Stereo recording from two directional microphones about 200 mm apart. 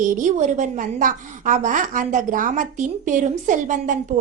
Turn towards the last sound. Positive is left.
turn(degrees=-40)  # may be behind; listen again after turning